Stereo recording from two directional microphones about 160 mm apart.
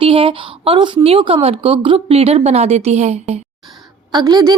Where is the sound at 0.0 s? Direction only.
35° right (ahead or behind).